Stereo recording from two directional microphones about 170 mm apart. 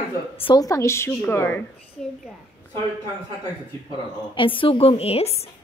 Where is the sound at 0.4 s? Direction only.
25° left (ahead or behind).